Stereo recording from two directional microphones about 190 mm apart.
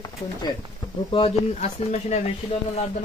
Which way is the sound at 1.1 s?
30° left (ahead or behind).